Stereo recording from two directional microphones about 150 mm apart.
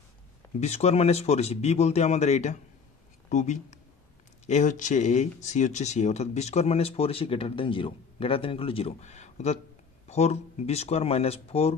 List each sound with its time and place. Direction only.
0.6 s speech: 50° left (ahead or behind)